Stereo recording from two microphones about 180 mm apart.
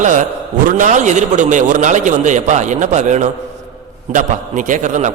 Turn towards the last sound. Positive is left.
turn(degrees=-45)  # may be behind; listen again after turning